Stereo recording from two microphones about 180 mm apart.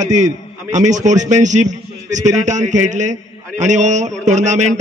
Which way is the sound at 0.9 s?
40° right (ahead or behind).